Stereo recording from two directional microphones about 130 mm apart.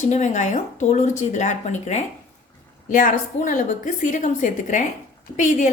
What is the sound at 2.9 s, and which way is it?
A woman's voice, 85° left.